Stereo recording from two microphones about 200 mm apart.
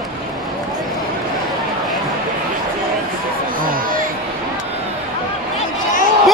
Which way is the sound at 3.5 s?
45° right (ahead or behind).